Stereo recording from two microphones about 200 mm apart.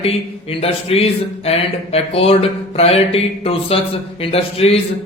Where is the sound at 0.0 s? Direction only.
30° left (ahead or behind).